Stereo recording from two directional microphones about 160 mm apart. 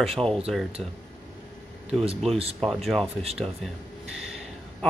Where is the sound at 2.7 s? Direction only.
Centre (ahead or behind).